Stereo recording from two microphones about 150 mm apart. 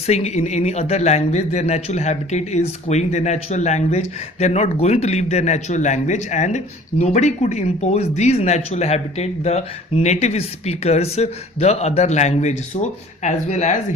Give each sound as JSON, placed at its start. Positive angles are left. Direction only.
{"t": 0.1, "sound": "speech", "side_deg": 45}